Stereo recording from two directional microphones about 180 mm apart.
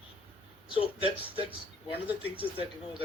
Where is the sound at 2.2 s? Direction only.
30° left (ahead or behind).